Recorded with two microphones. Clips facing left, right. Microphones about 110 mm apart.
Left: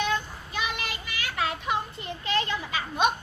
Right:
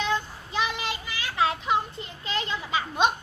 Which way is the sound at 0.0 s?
25° right (ahead or behind).